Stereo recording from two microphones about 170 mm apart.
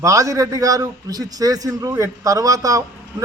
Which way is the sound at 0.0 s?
20° right (ahead or behind).